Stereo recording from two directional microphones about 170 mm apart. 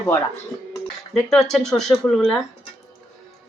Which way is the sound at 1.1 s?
Centre (ahead or behind).